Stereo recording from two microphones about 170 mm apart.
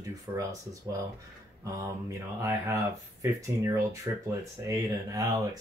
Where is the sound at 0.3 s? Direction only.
15° right (ahead or behind).